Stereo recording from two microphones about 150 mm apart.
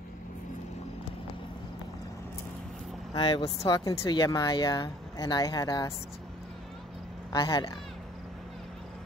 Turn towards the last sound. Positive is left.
turn(degrees=30)  # may be behind; listen again after turning